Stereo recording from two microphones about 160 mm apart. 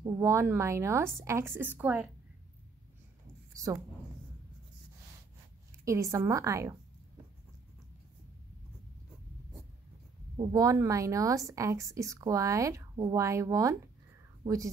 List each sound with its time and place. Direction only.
0.0 s a woman's voice: 20° right (ahead or behind)
3.5 s a woman's voice: 20° right (ahead or behind)
5.9 s a woman's voice: 20° right (ahead or behind)
10.3 s a woman's voice: 25° right (ahead or behind)